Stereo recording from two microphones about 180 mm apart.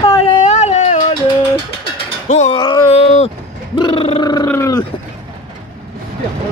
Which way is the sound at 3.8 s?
30° left (ahead or behind).